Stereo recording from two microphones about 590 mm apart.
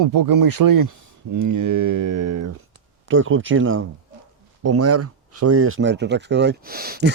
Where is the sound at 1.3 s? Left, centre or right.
Right.